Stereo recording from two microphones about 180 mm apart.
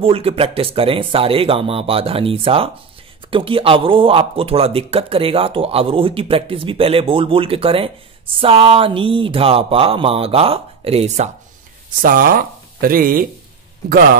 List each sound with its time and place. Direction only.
0.0 s speech: 30° right (ahead or behind)
12.0 s speech: 50° right (ahead or behind)